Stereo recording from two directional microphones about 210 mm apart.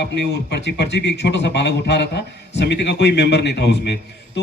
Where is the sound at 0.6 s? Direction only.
55° left (ahead or behind).